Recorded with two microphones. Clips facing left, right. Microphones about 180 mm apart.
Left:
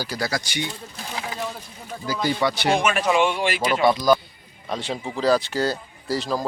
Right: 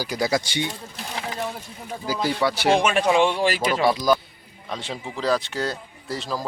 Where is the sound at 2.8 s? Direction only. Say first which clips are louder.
Right 1 dB; 30° right (ahead or behind).